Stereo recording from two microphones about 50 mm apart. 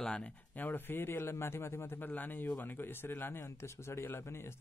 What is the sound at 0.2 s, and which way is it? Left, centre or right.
Speech, left.